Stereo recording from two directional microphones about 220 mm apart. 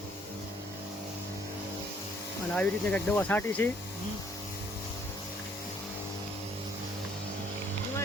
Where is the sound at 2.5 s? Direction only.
5° left (ahead or behind).